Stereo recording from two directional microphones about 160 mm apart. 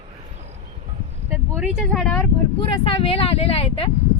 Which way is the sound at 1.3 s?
5° right (ahead or behind).